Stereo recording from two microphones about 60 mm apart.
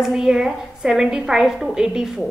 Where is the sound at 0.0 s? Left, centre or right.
Centre.